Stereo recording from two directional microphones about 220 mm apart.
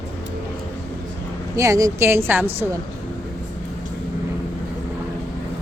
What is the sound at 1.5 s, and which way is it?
Speech, 15° right (ahead or behind).